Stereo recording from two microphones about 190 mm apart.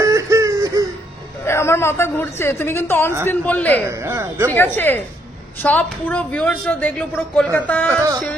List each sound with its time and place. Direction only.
0.0 s a sound: 15° right (ahead or behind)
1.4 s a woman's voice: 15° left (ahead or behind)
3.9 s speech: 15° right (ahead or behind)
4.5 s a woman's voice: 10° left (ahead or behind)